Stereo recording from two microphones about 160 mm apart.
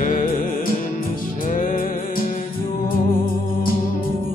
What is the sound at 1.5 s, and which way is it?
Music, 55° left (ahead or behind).